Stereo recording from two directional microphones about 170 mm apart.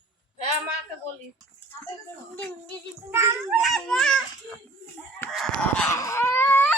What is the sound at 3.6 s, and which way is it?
Fowl, centre (ahead or behind).